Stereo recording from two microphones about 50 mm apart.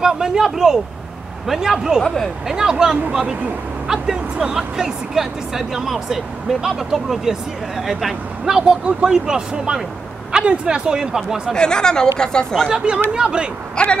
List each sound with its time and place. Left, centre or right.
0.0 s speech: centre
11.5 s speech: centre
12.6 s speech: centre
13.8 s speech: centre